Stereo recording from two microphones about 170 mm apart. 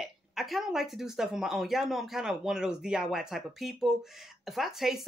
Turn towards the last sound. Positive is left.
turn(degrees=0)  # may be behind; listen again after turning